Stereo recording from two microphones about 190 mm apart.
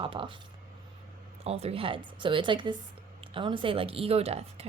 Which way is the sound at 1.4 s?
30° right (ahead or behind).